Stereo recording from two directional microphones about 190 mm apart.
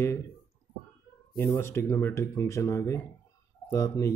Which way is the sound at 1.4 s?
15° left (ahead or behind).